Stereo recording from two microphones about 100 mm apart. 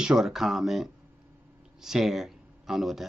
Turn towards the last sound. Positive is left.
turn(degrees=0)  # may be behind; listen again after turning